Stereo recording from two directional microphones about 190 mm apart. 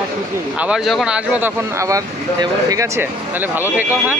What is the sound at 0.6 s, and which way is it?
Speech, 5° right (ahead or behind).